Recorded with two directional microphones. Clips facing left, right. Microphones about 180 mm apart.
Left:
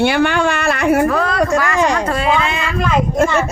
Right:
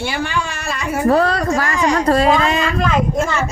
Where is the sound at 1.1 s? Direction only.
35° right (ahead or behind).